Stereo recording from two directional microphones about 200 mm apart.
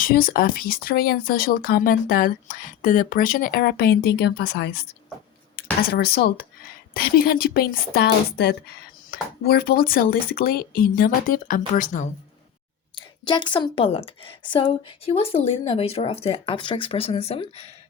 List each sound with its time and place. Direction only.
0.0 s a woman's voice: 45° left (ahead or behind)
5.8 s a woman's voice: 50° left (ahead or behind)
13.0 s a woman's voice: 25° left (ahead or behind)